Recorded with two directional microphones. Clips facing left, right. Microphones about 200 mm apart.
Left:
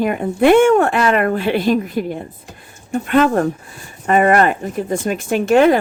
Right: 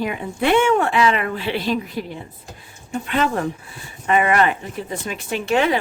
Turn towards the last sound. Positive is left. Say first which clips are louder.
# left 7 dB
turn(degrees=45)  # may be behind; listen again after turning